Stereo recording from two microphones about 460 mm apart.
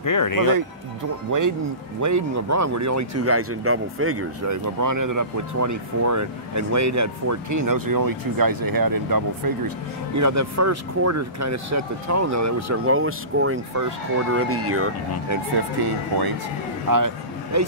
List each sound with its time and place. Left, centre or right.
0.0 s speech: left
1.3 s speech: right
10.1 s speech: right
16.9 s a man's voice: right